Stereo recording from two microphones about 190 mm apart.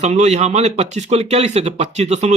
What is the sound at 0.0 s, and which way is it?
A man's voice, 35° right (ahead or behind).